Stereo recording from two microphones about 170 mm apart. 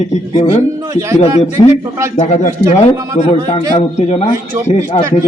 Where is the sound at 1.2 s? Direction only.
40° left (ahead or behind).